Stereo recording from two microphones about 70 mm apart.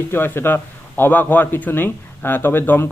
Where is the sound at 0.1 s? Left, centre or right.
Left.